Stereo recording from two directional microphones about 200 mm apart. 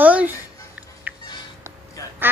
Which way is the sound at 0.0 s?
10° right (ahead or behind).